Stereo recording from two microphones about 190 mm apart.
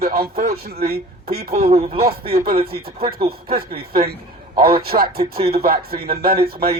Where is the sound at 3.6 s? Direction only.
55° right (ahead or behind).